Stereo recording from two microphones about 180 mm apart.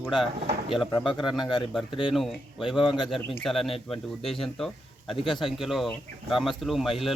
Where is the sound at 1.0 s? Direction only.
25° left (ahead or behind).